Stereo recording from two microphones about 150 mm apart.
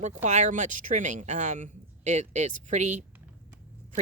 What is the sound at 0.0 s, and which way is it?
Speech, 55° right (ahead or behind).